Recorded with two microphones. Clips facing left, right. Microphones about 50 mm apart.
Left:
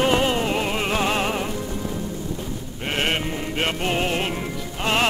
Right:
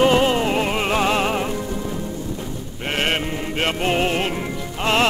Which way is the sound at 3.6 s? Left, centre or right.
Right.